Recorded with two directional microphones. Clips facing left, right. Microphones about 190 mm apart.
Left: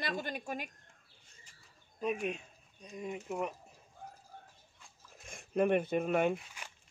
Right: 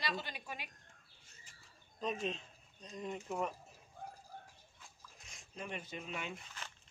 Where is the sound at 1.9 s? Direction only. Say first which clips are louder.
Left 4 dB; 10° left (ahead or behind).